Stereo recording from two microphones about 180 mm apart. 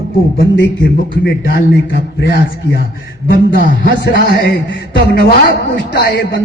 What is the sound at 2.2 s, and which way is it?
Speech, 70° left (ahead or behind).